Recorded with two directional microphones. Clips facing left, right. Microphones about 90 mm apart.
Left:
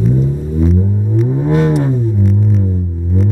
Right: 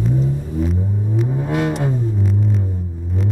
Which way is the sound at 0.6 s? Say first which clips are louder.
Left 7 dB; centre (ahead or behind).